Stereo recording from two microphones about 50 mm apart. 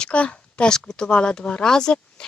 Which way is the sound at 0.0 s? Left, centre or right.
Left.